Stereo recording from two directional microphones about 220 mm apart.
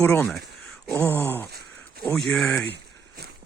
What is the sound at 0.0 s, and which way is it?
Speech, 5° left (ahead or behind).